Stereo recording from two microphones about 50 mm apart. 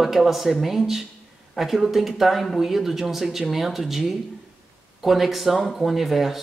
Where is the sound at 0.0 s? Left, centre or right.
Centre.